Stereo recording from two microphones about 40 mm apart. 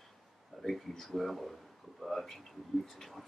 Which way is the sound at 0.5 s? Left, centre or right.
Centre.